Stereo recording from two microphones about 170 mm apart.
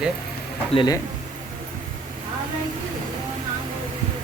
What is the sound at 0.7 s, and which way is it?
Speech, 30° left (ahead or behind).